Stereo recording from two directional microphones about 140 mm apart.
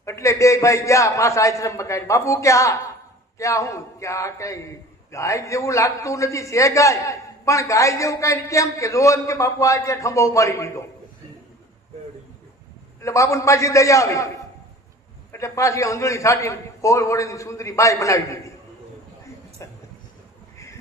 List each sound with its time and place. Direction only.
0.0 s a man's voice: 20° left (ahead or behind)
13.0 s a man's voice: 20° left (ahead or behind)
15.3 s a man's voice: 20° left (ahead or behind)